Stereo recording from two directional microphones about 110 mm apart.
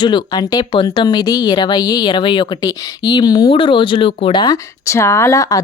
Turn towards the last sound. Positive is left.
turn(degrees=30)  # may be behind; listen again after turning